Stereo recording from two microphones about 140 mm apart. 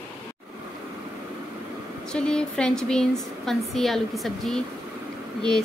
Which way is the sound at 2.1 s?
5° left (ahead or behind).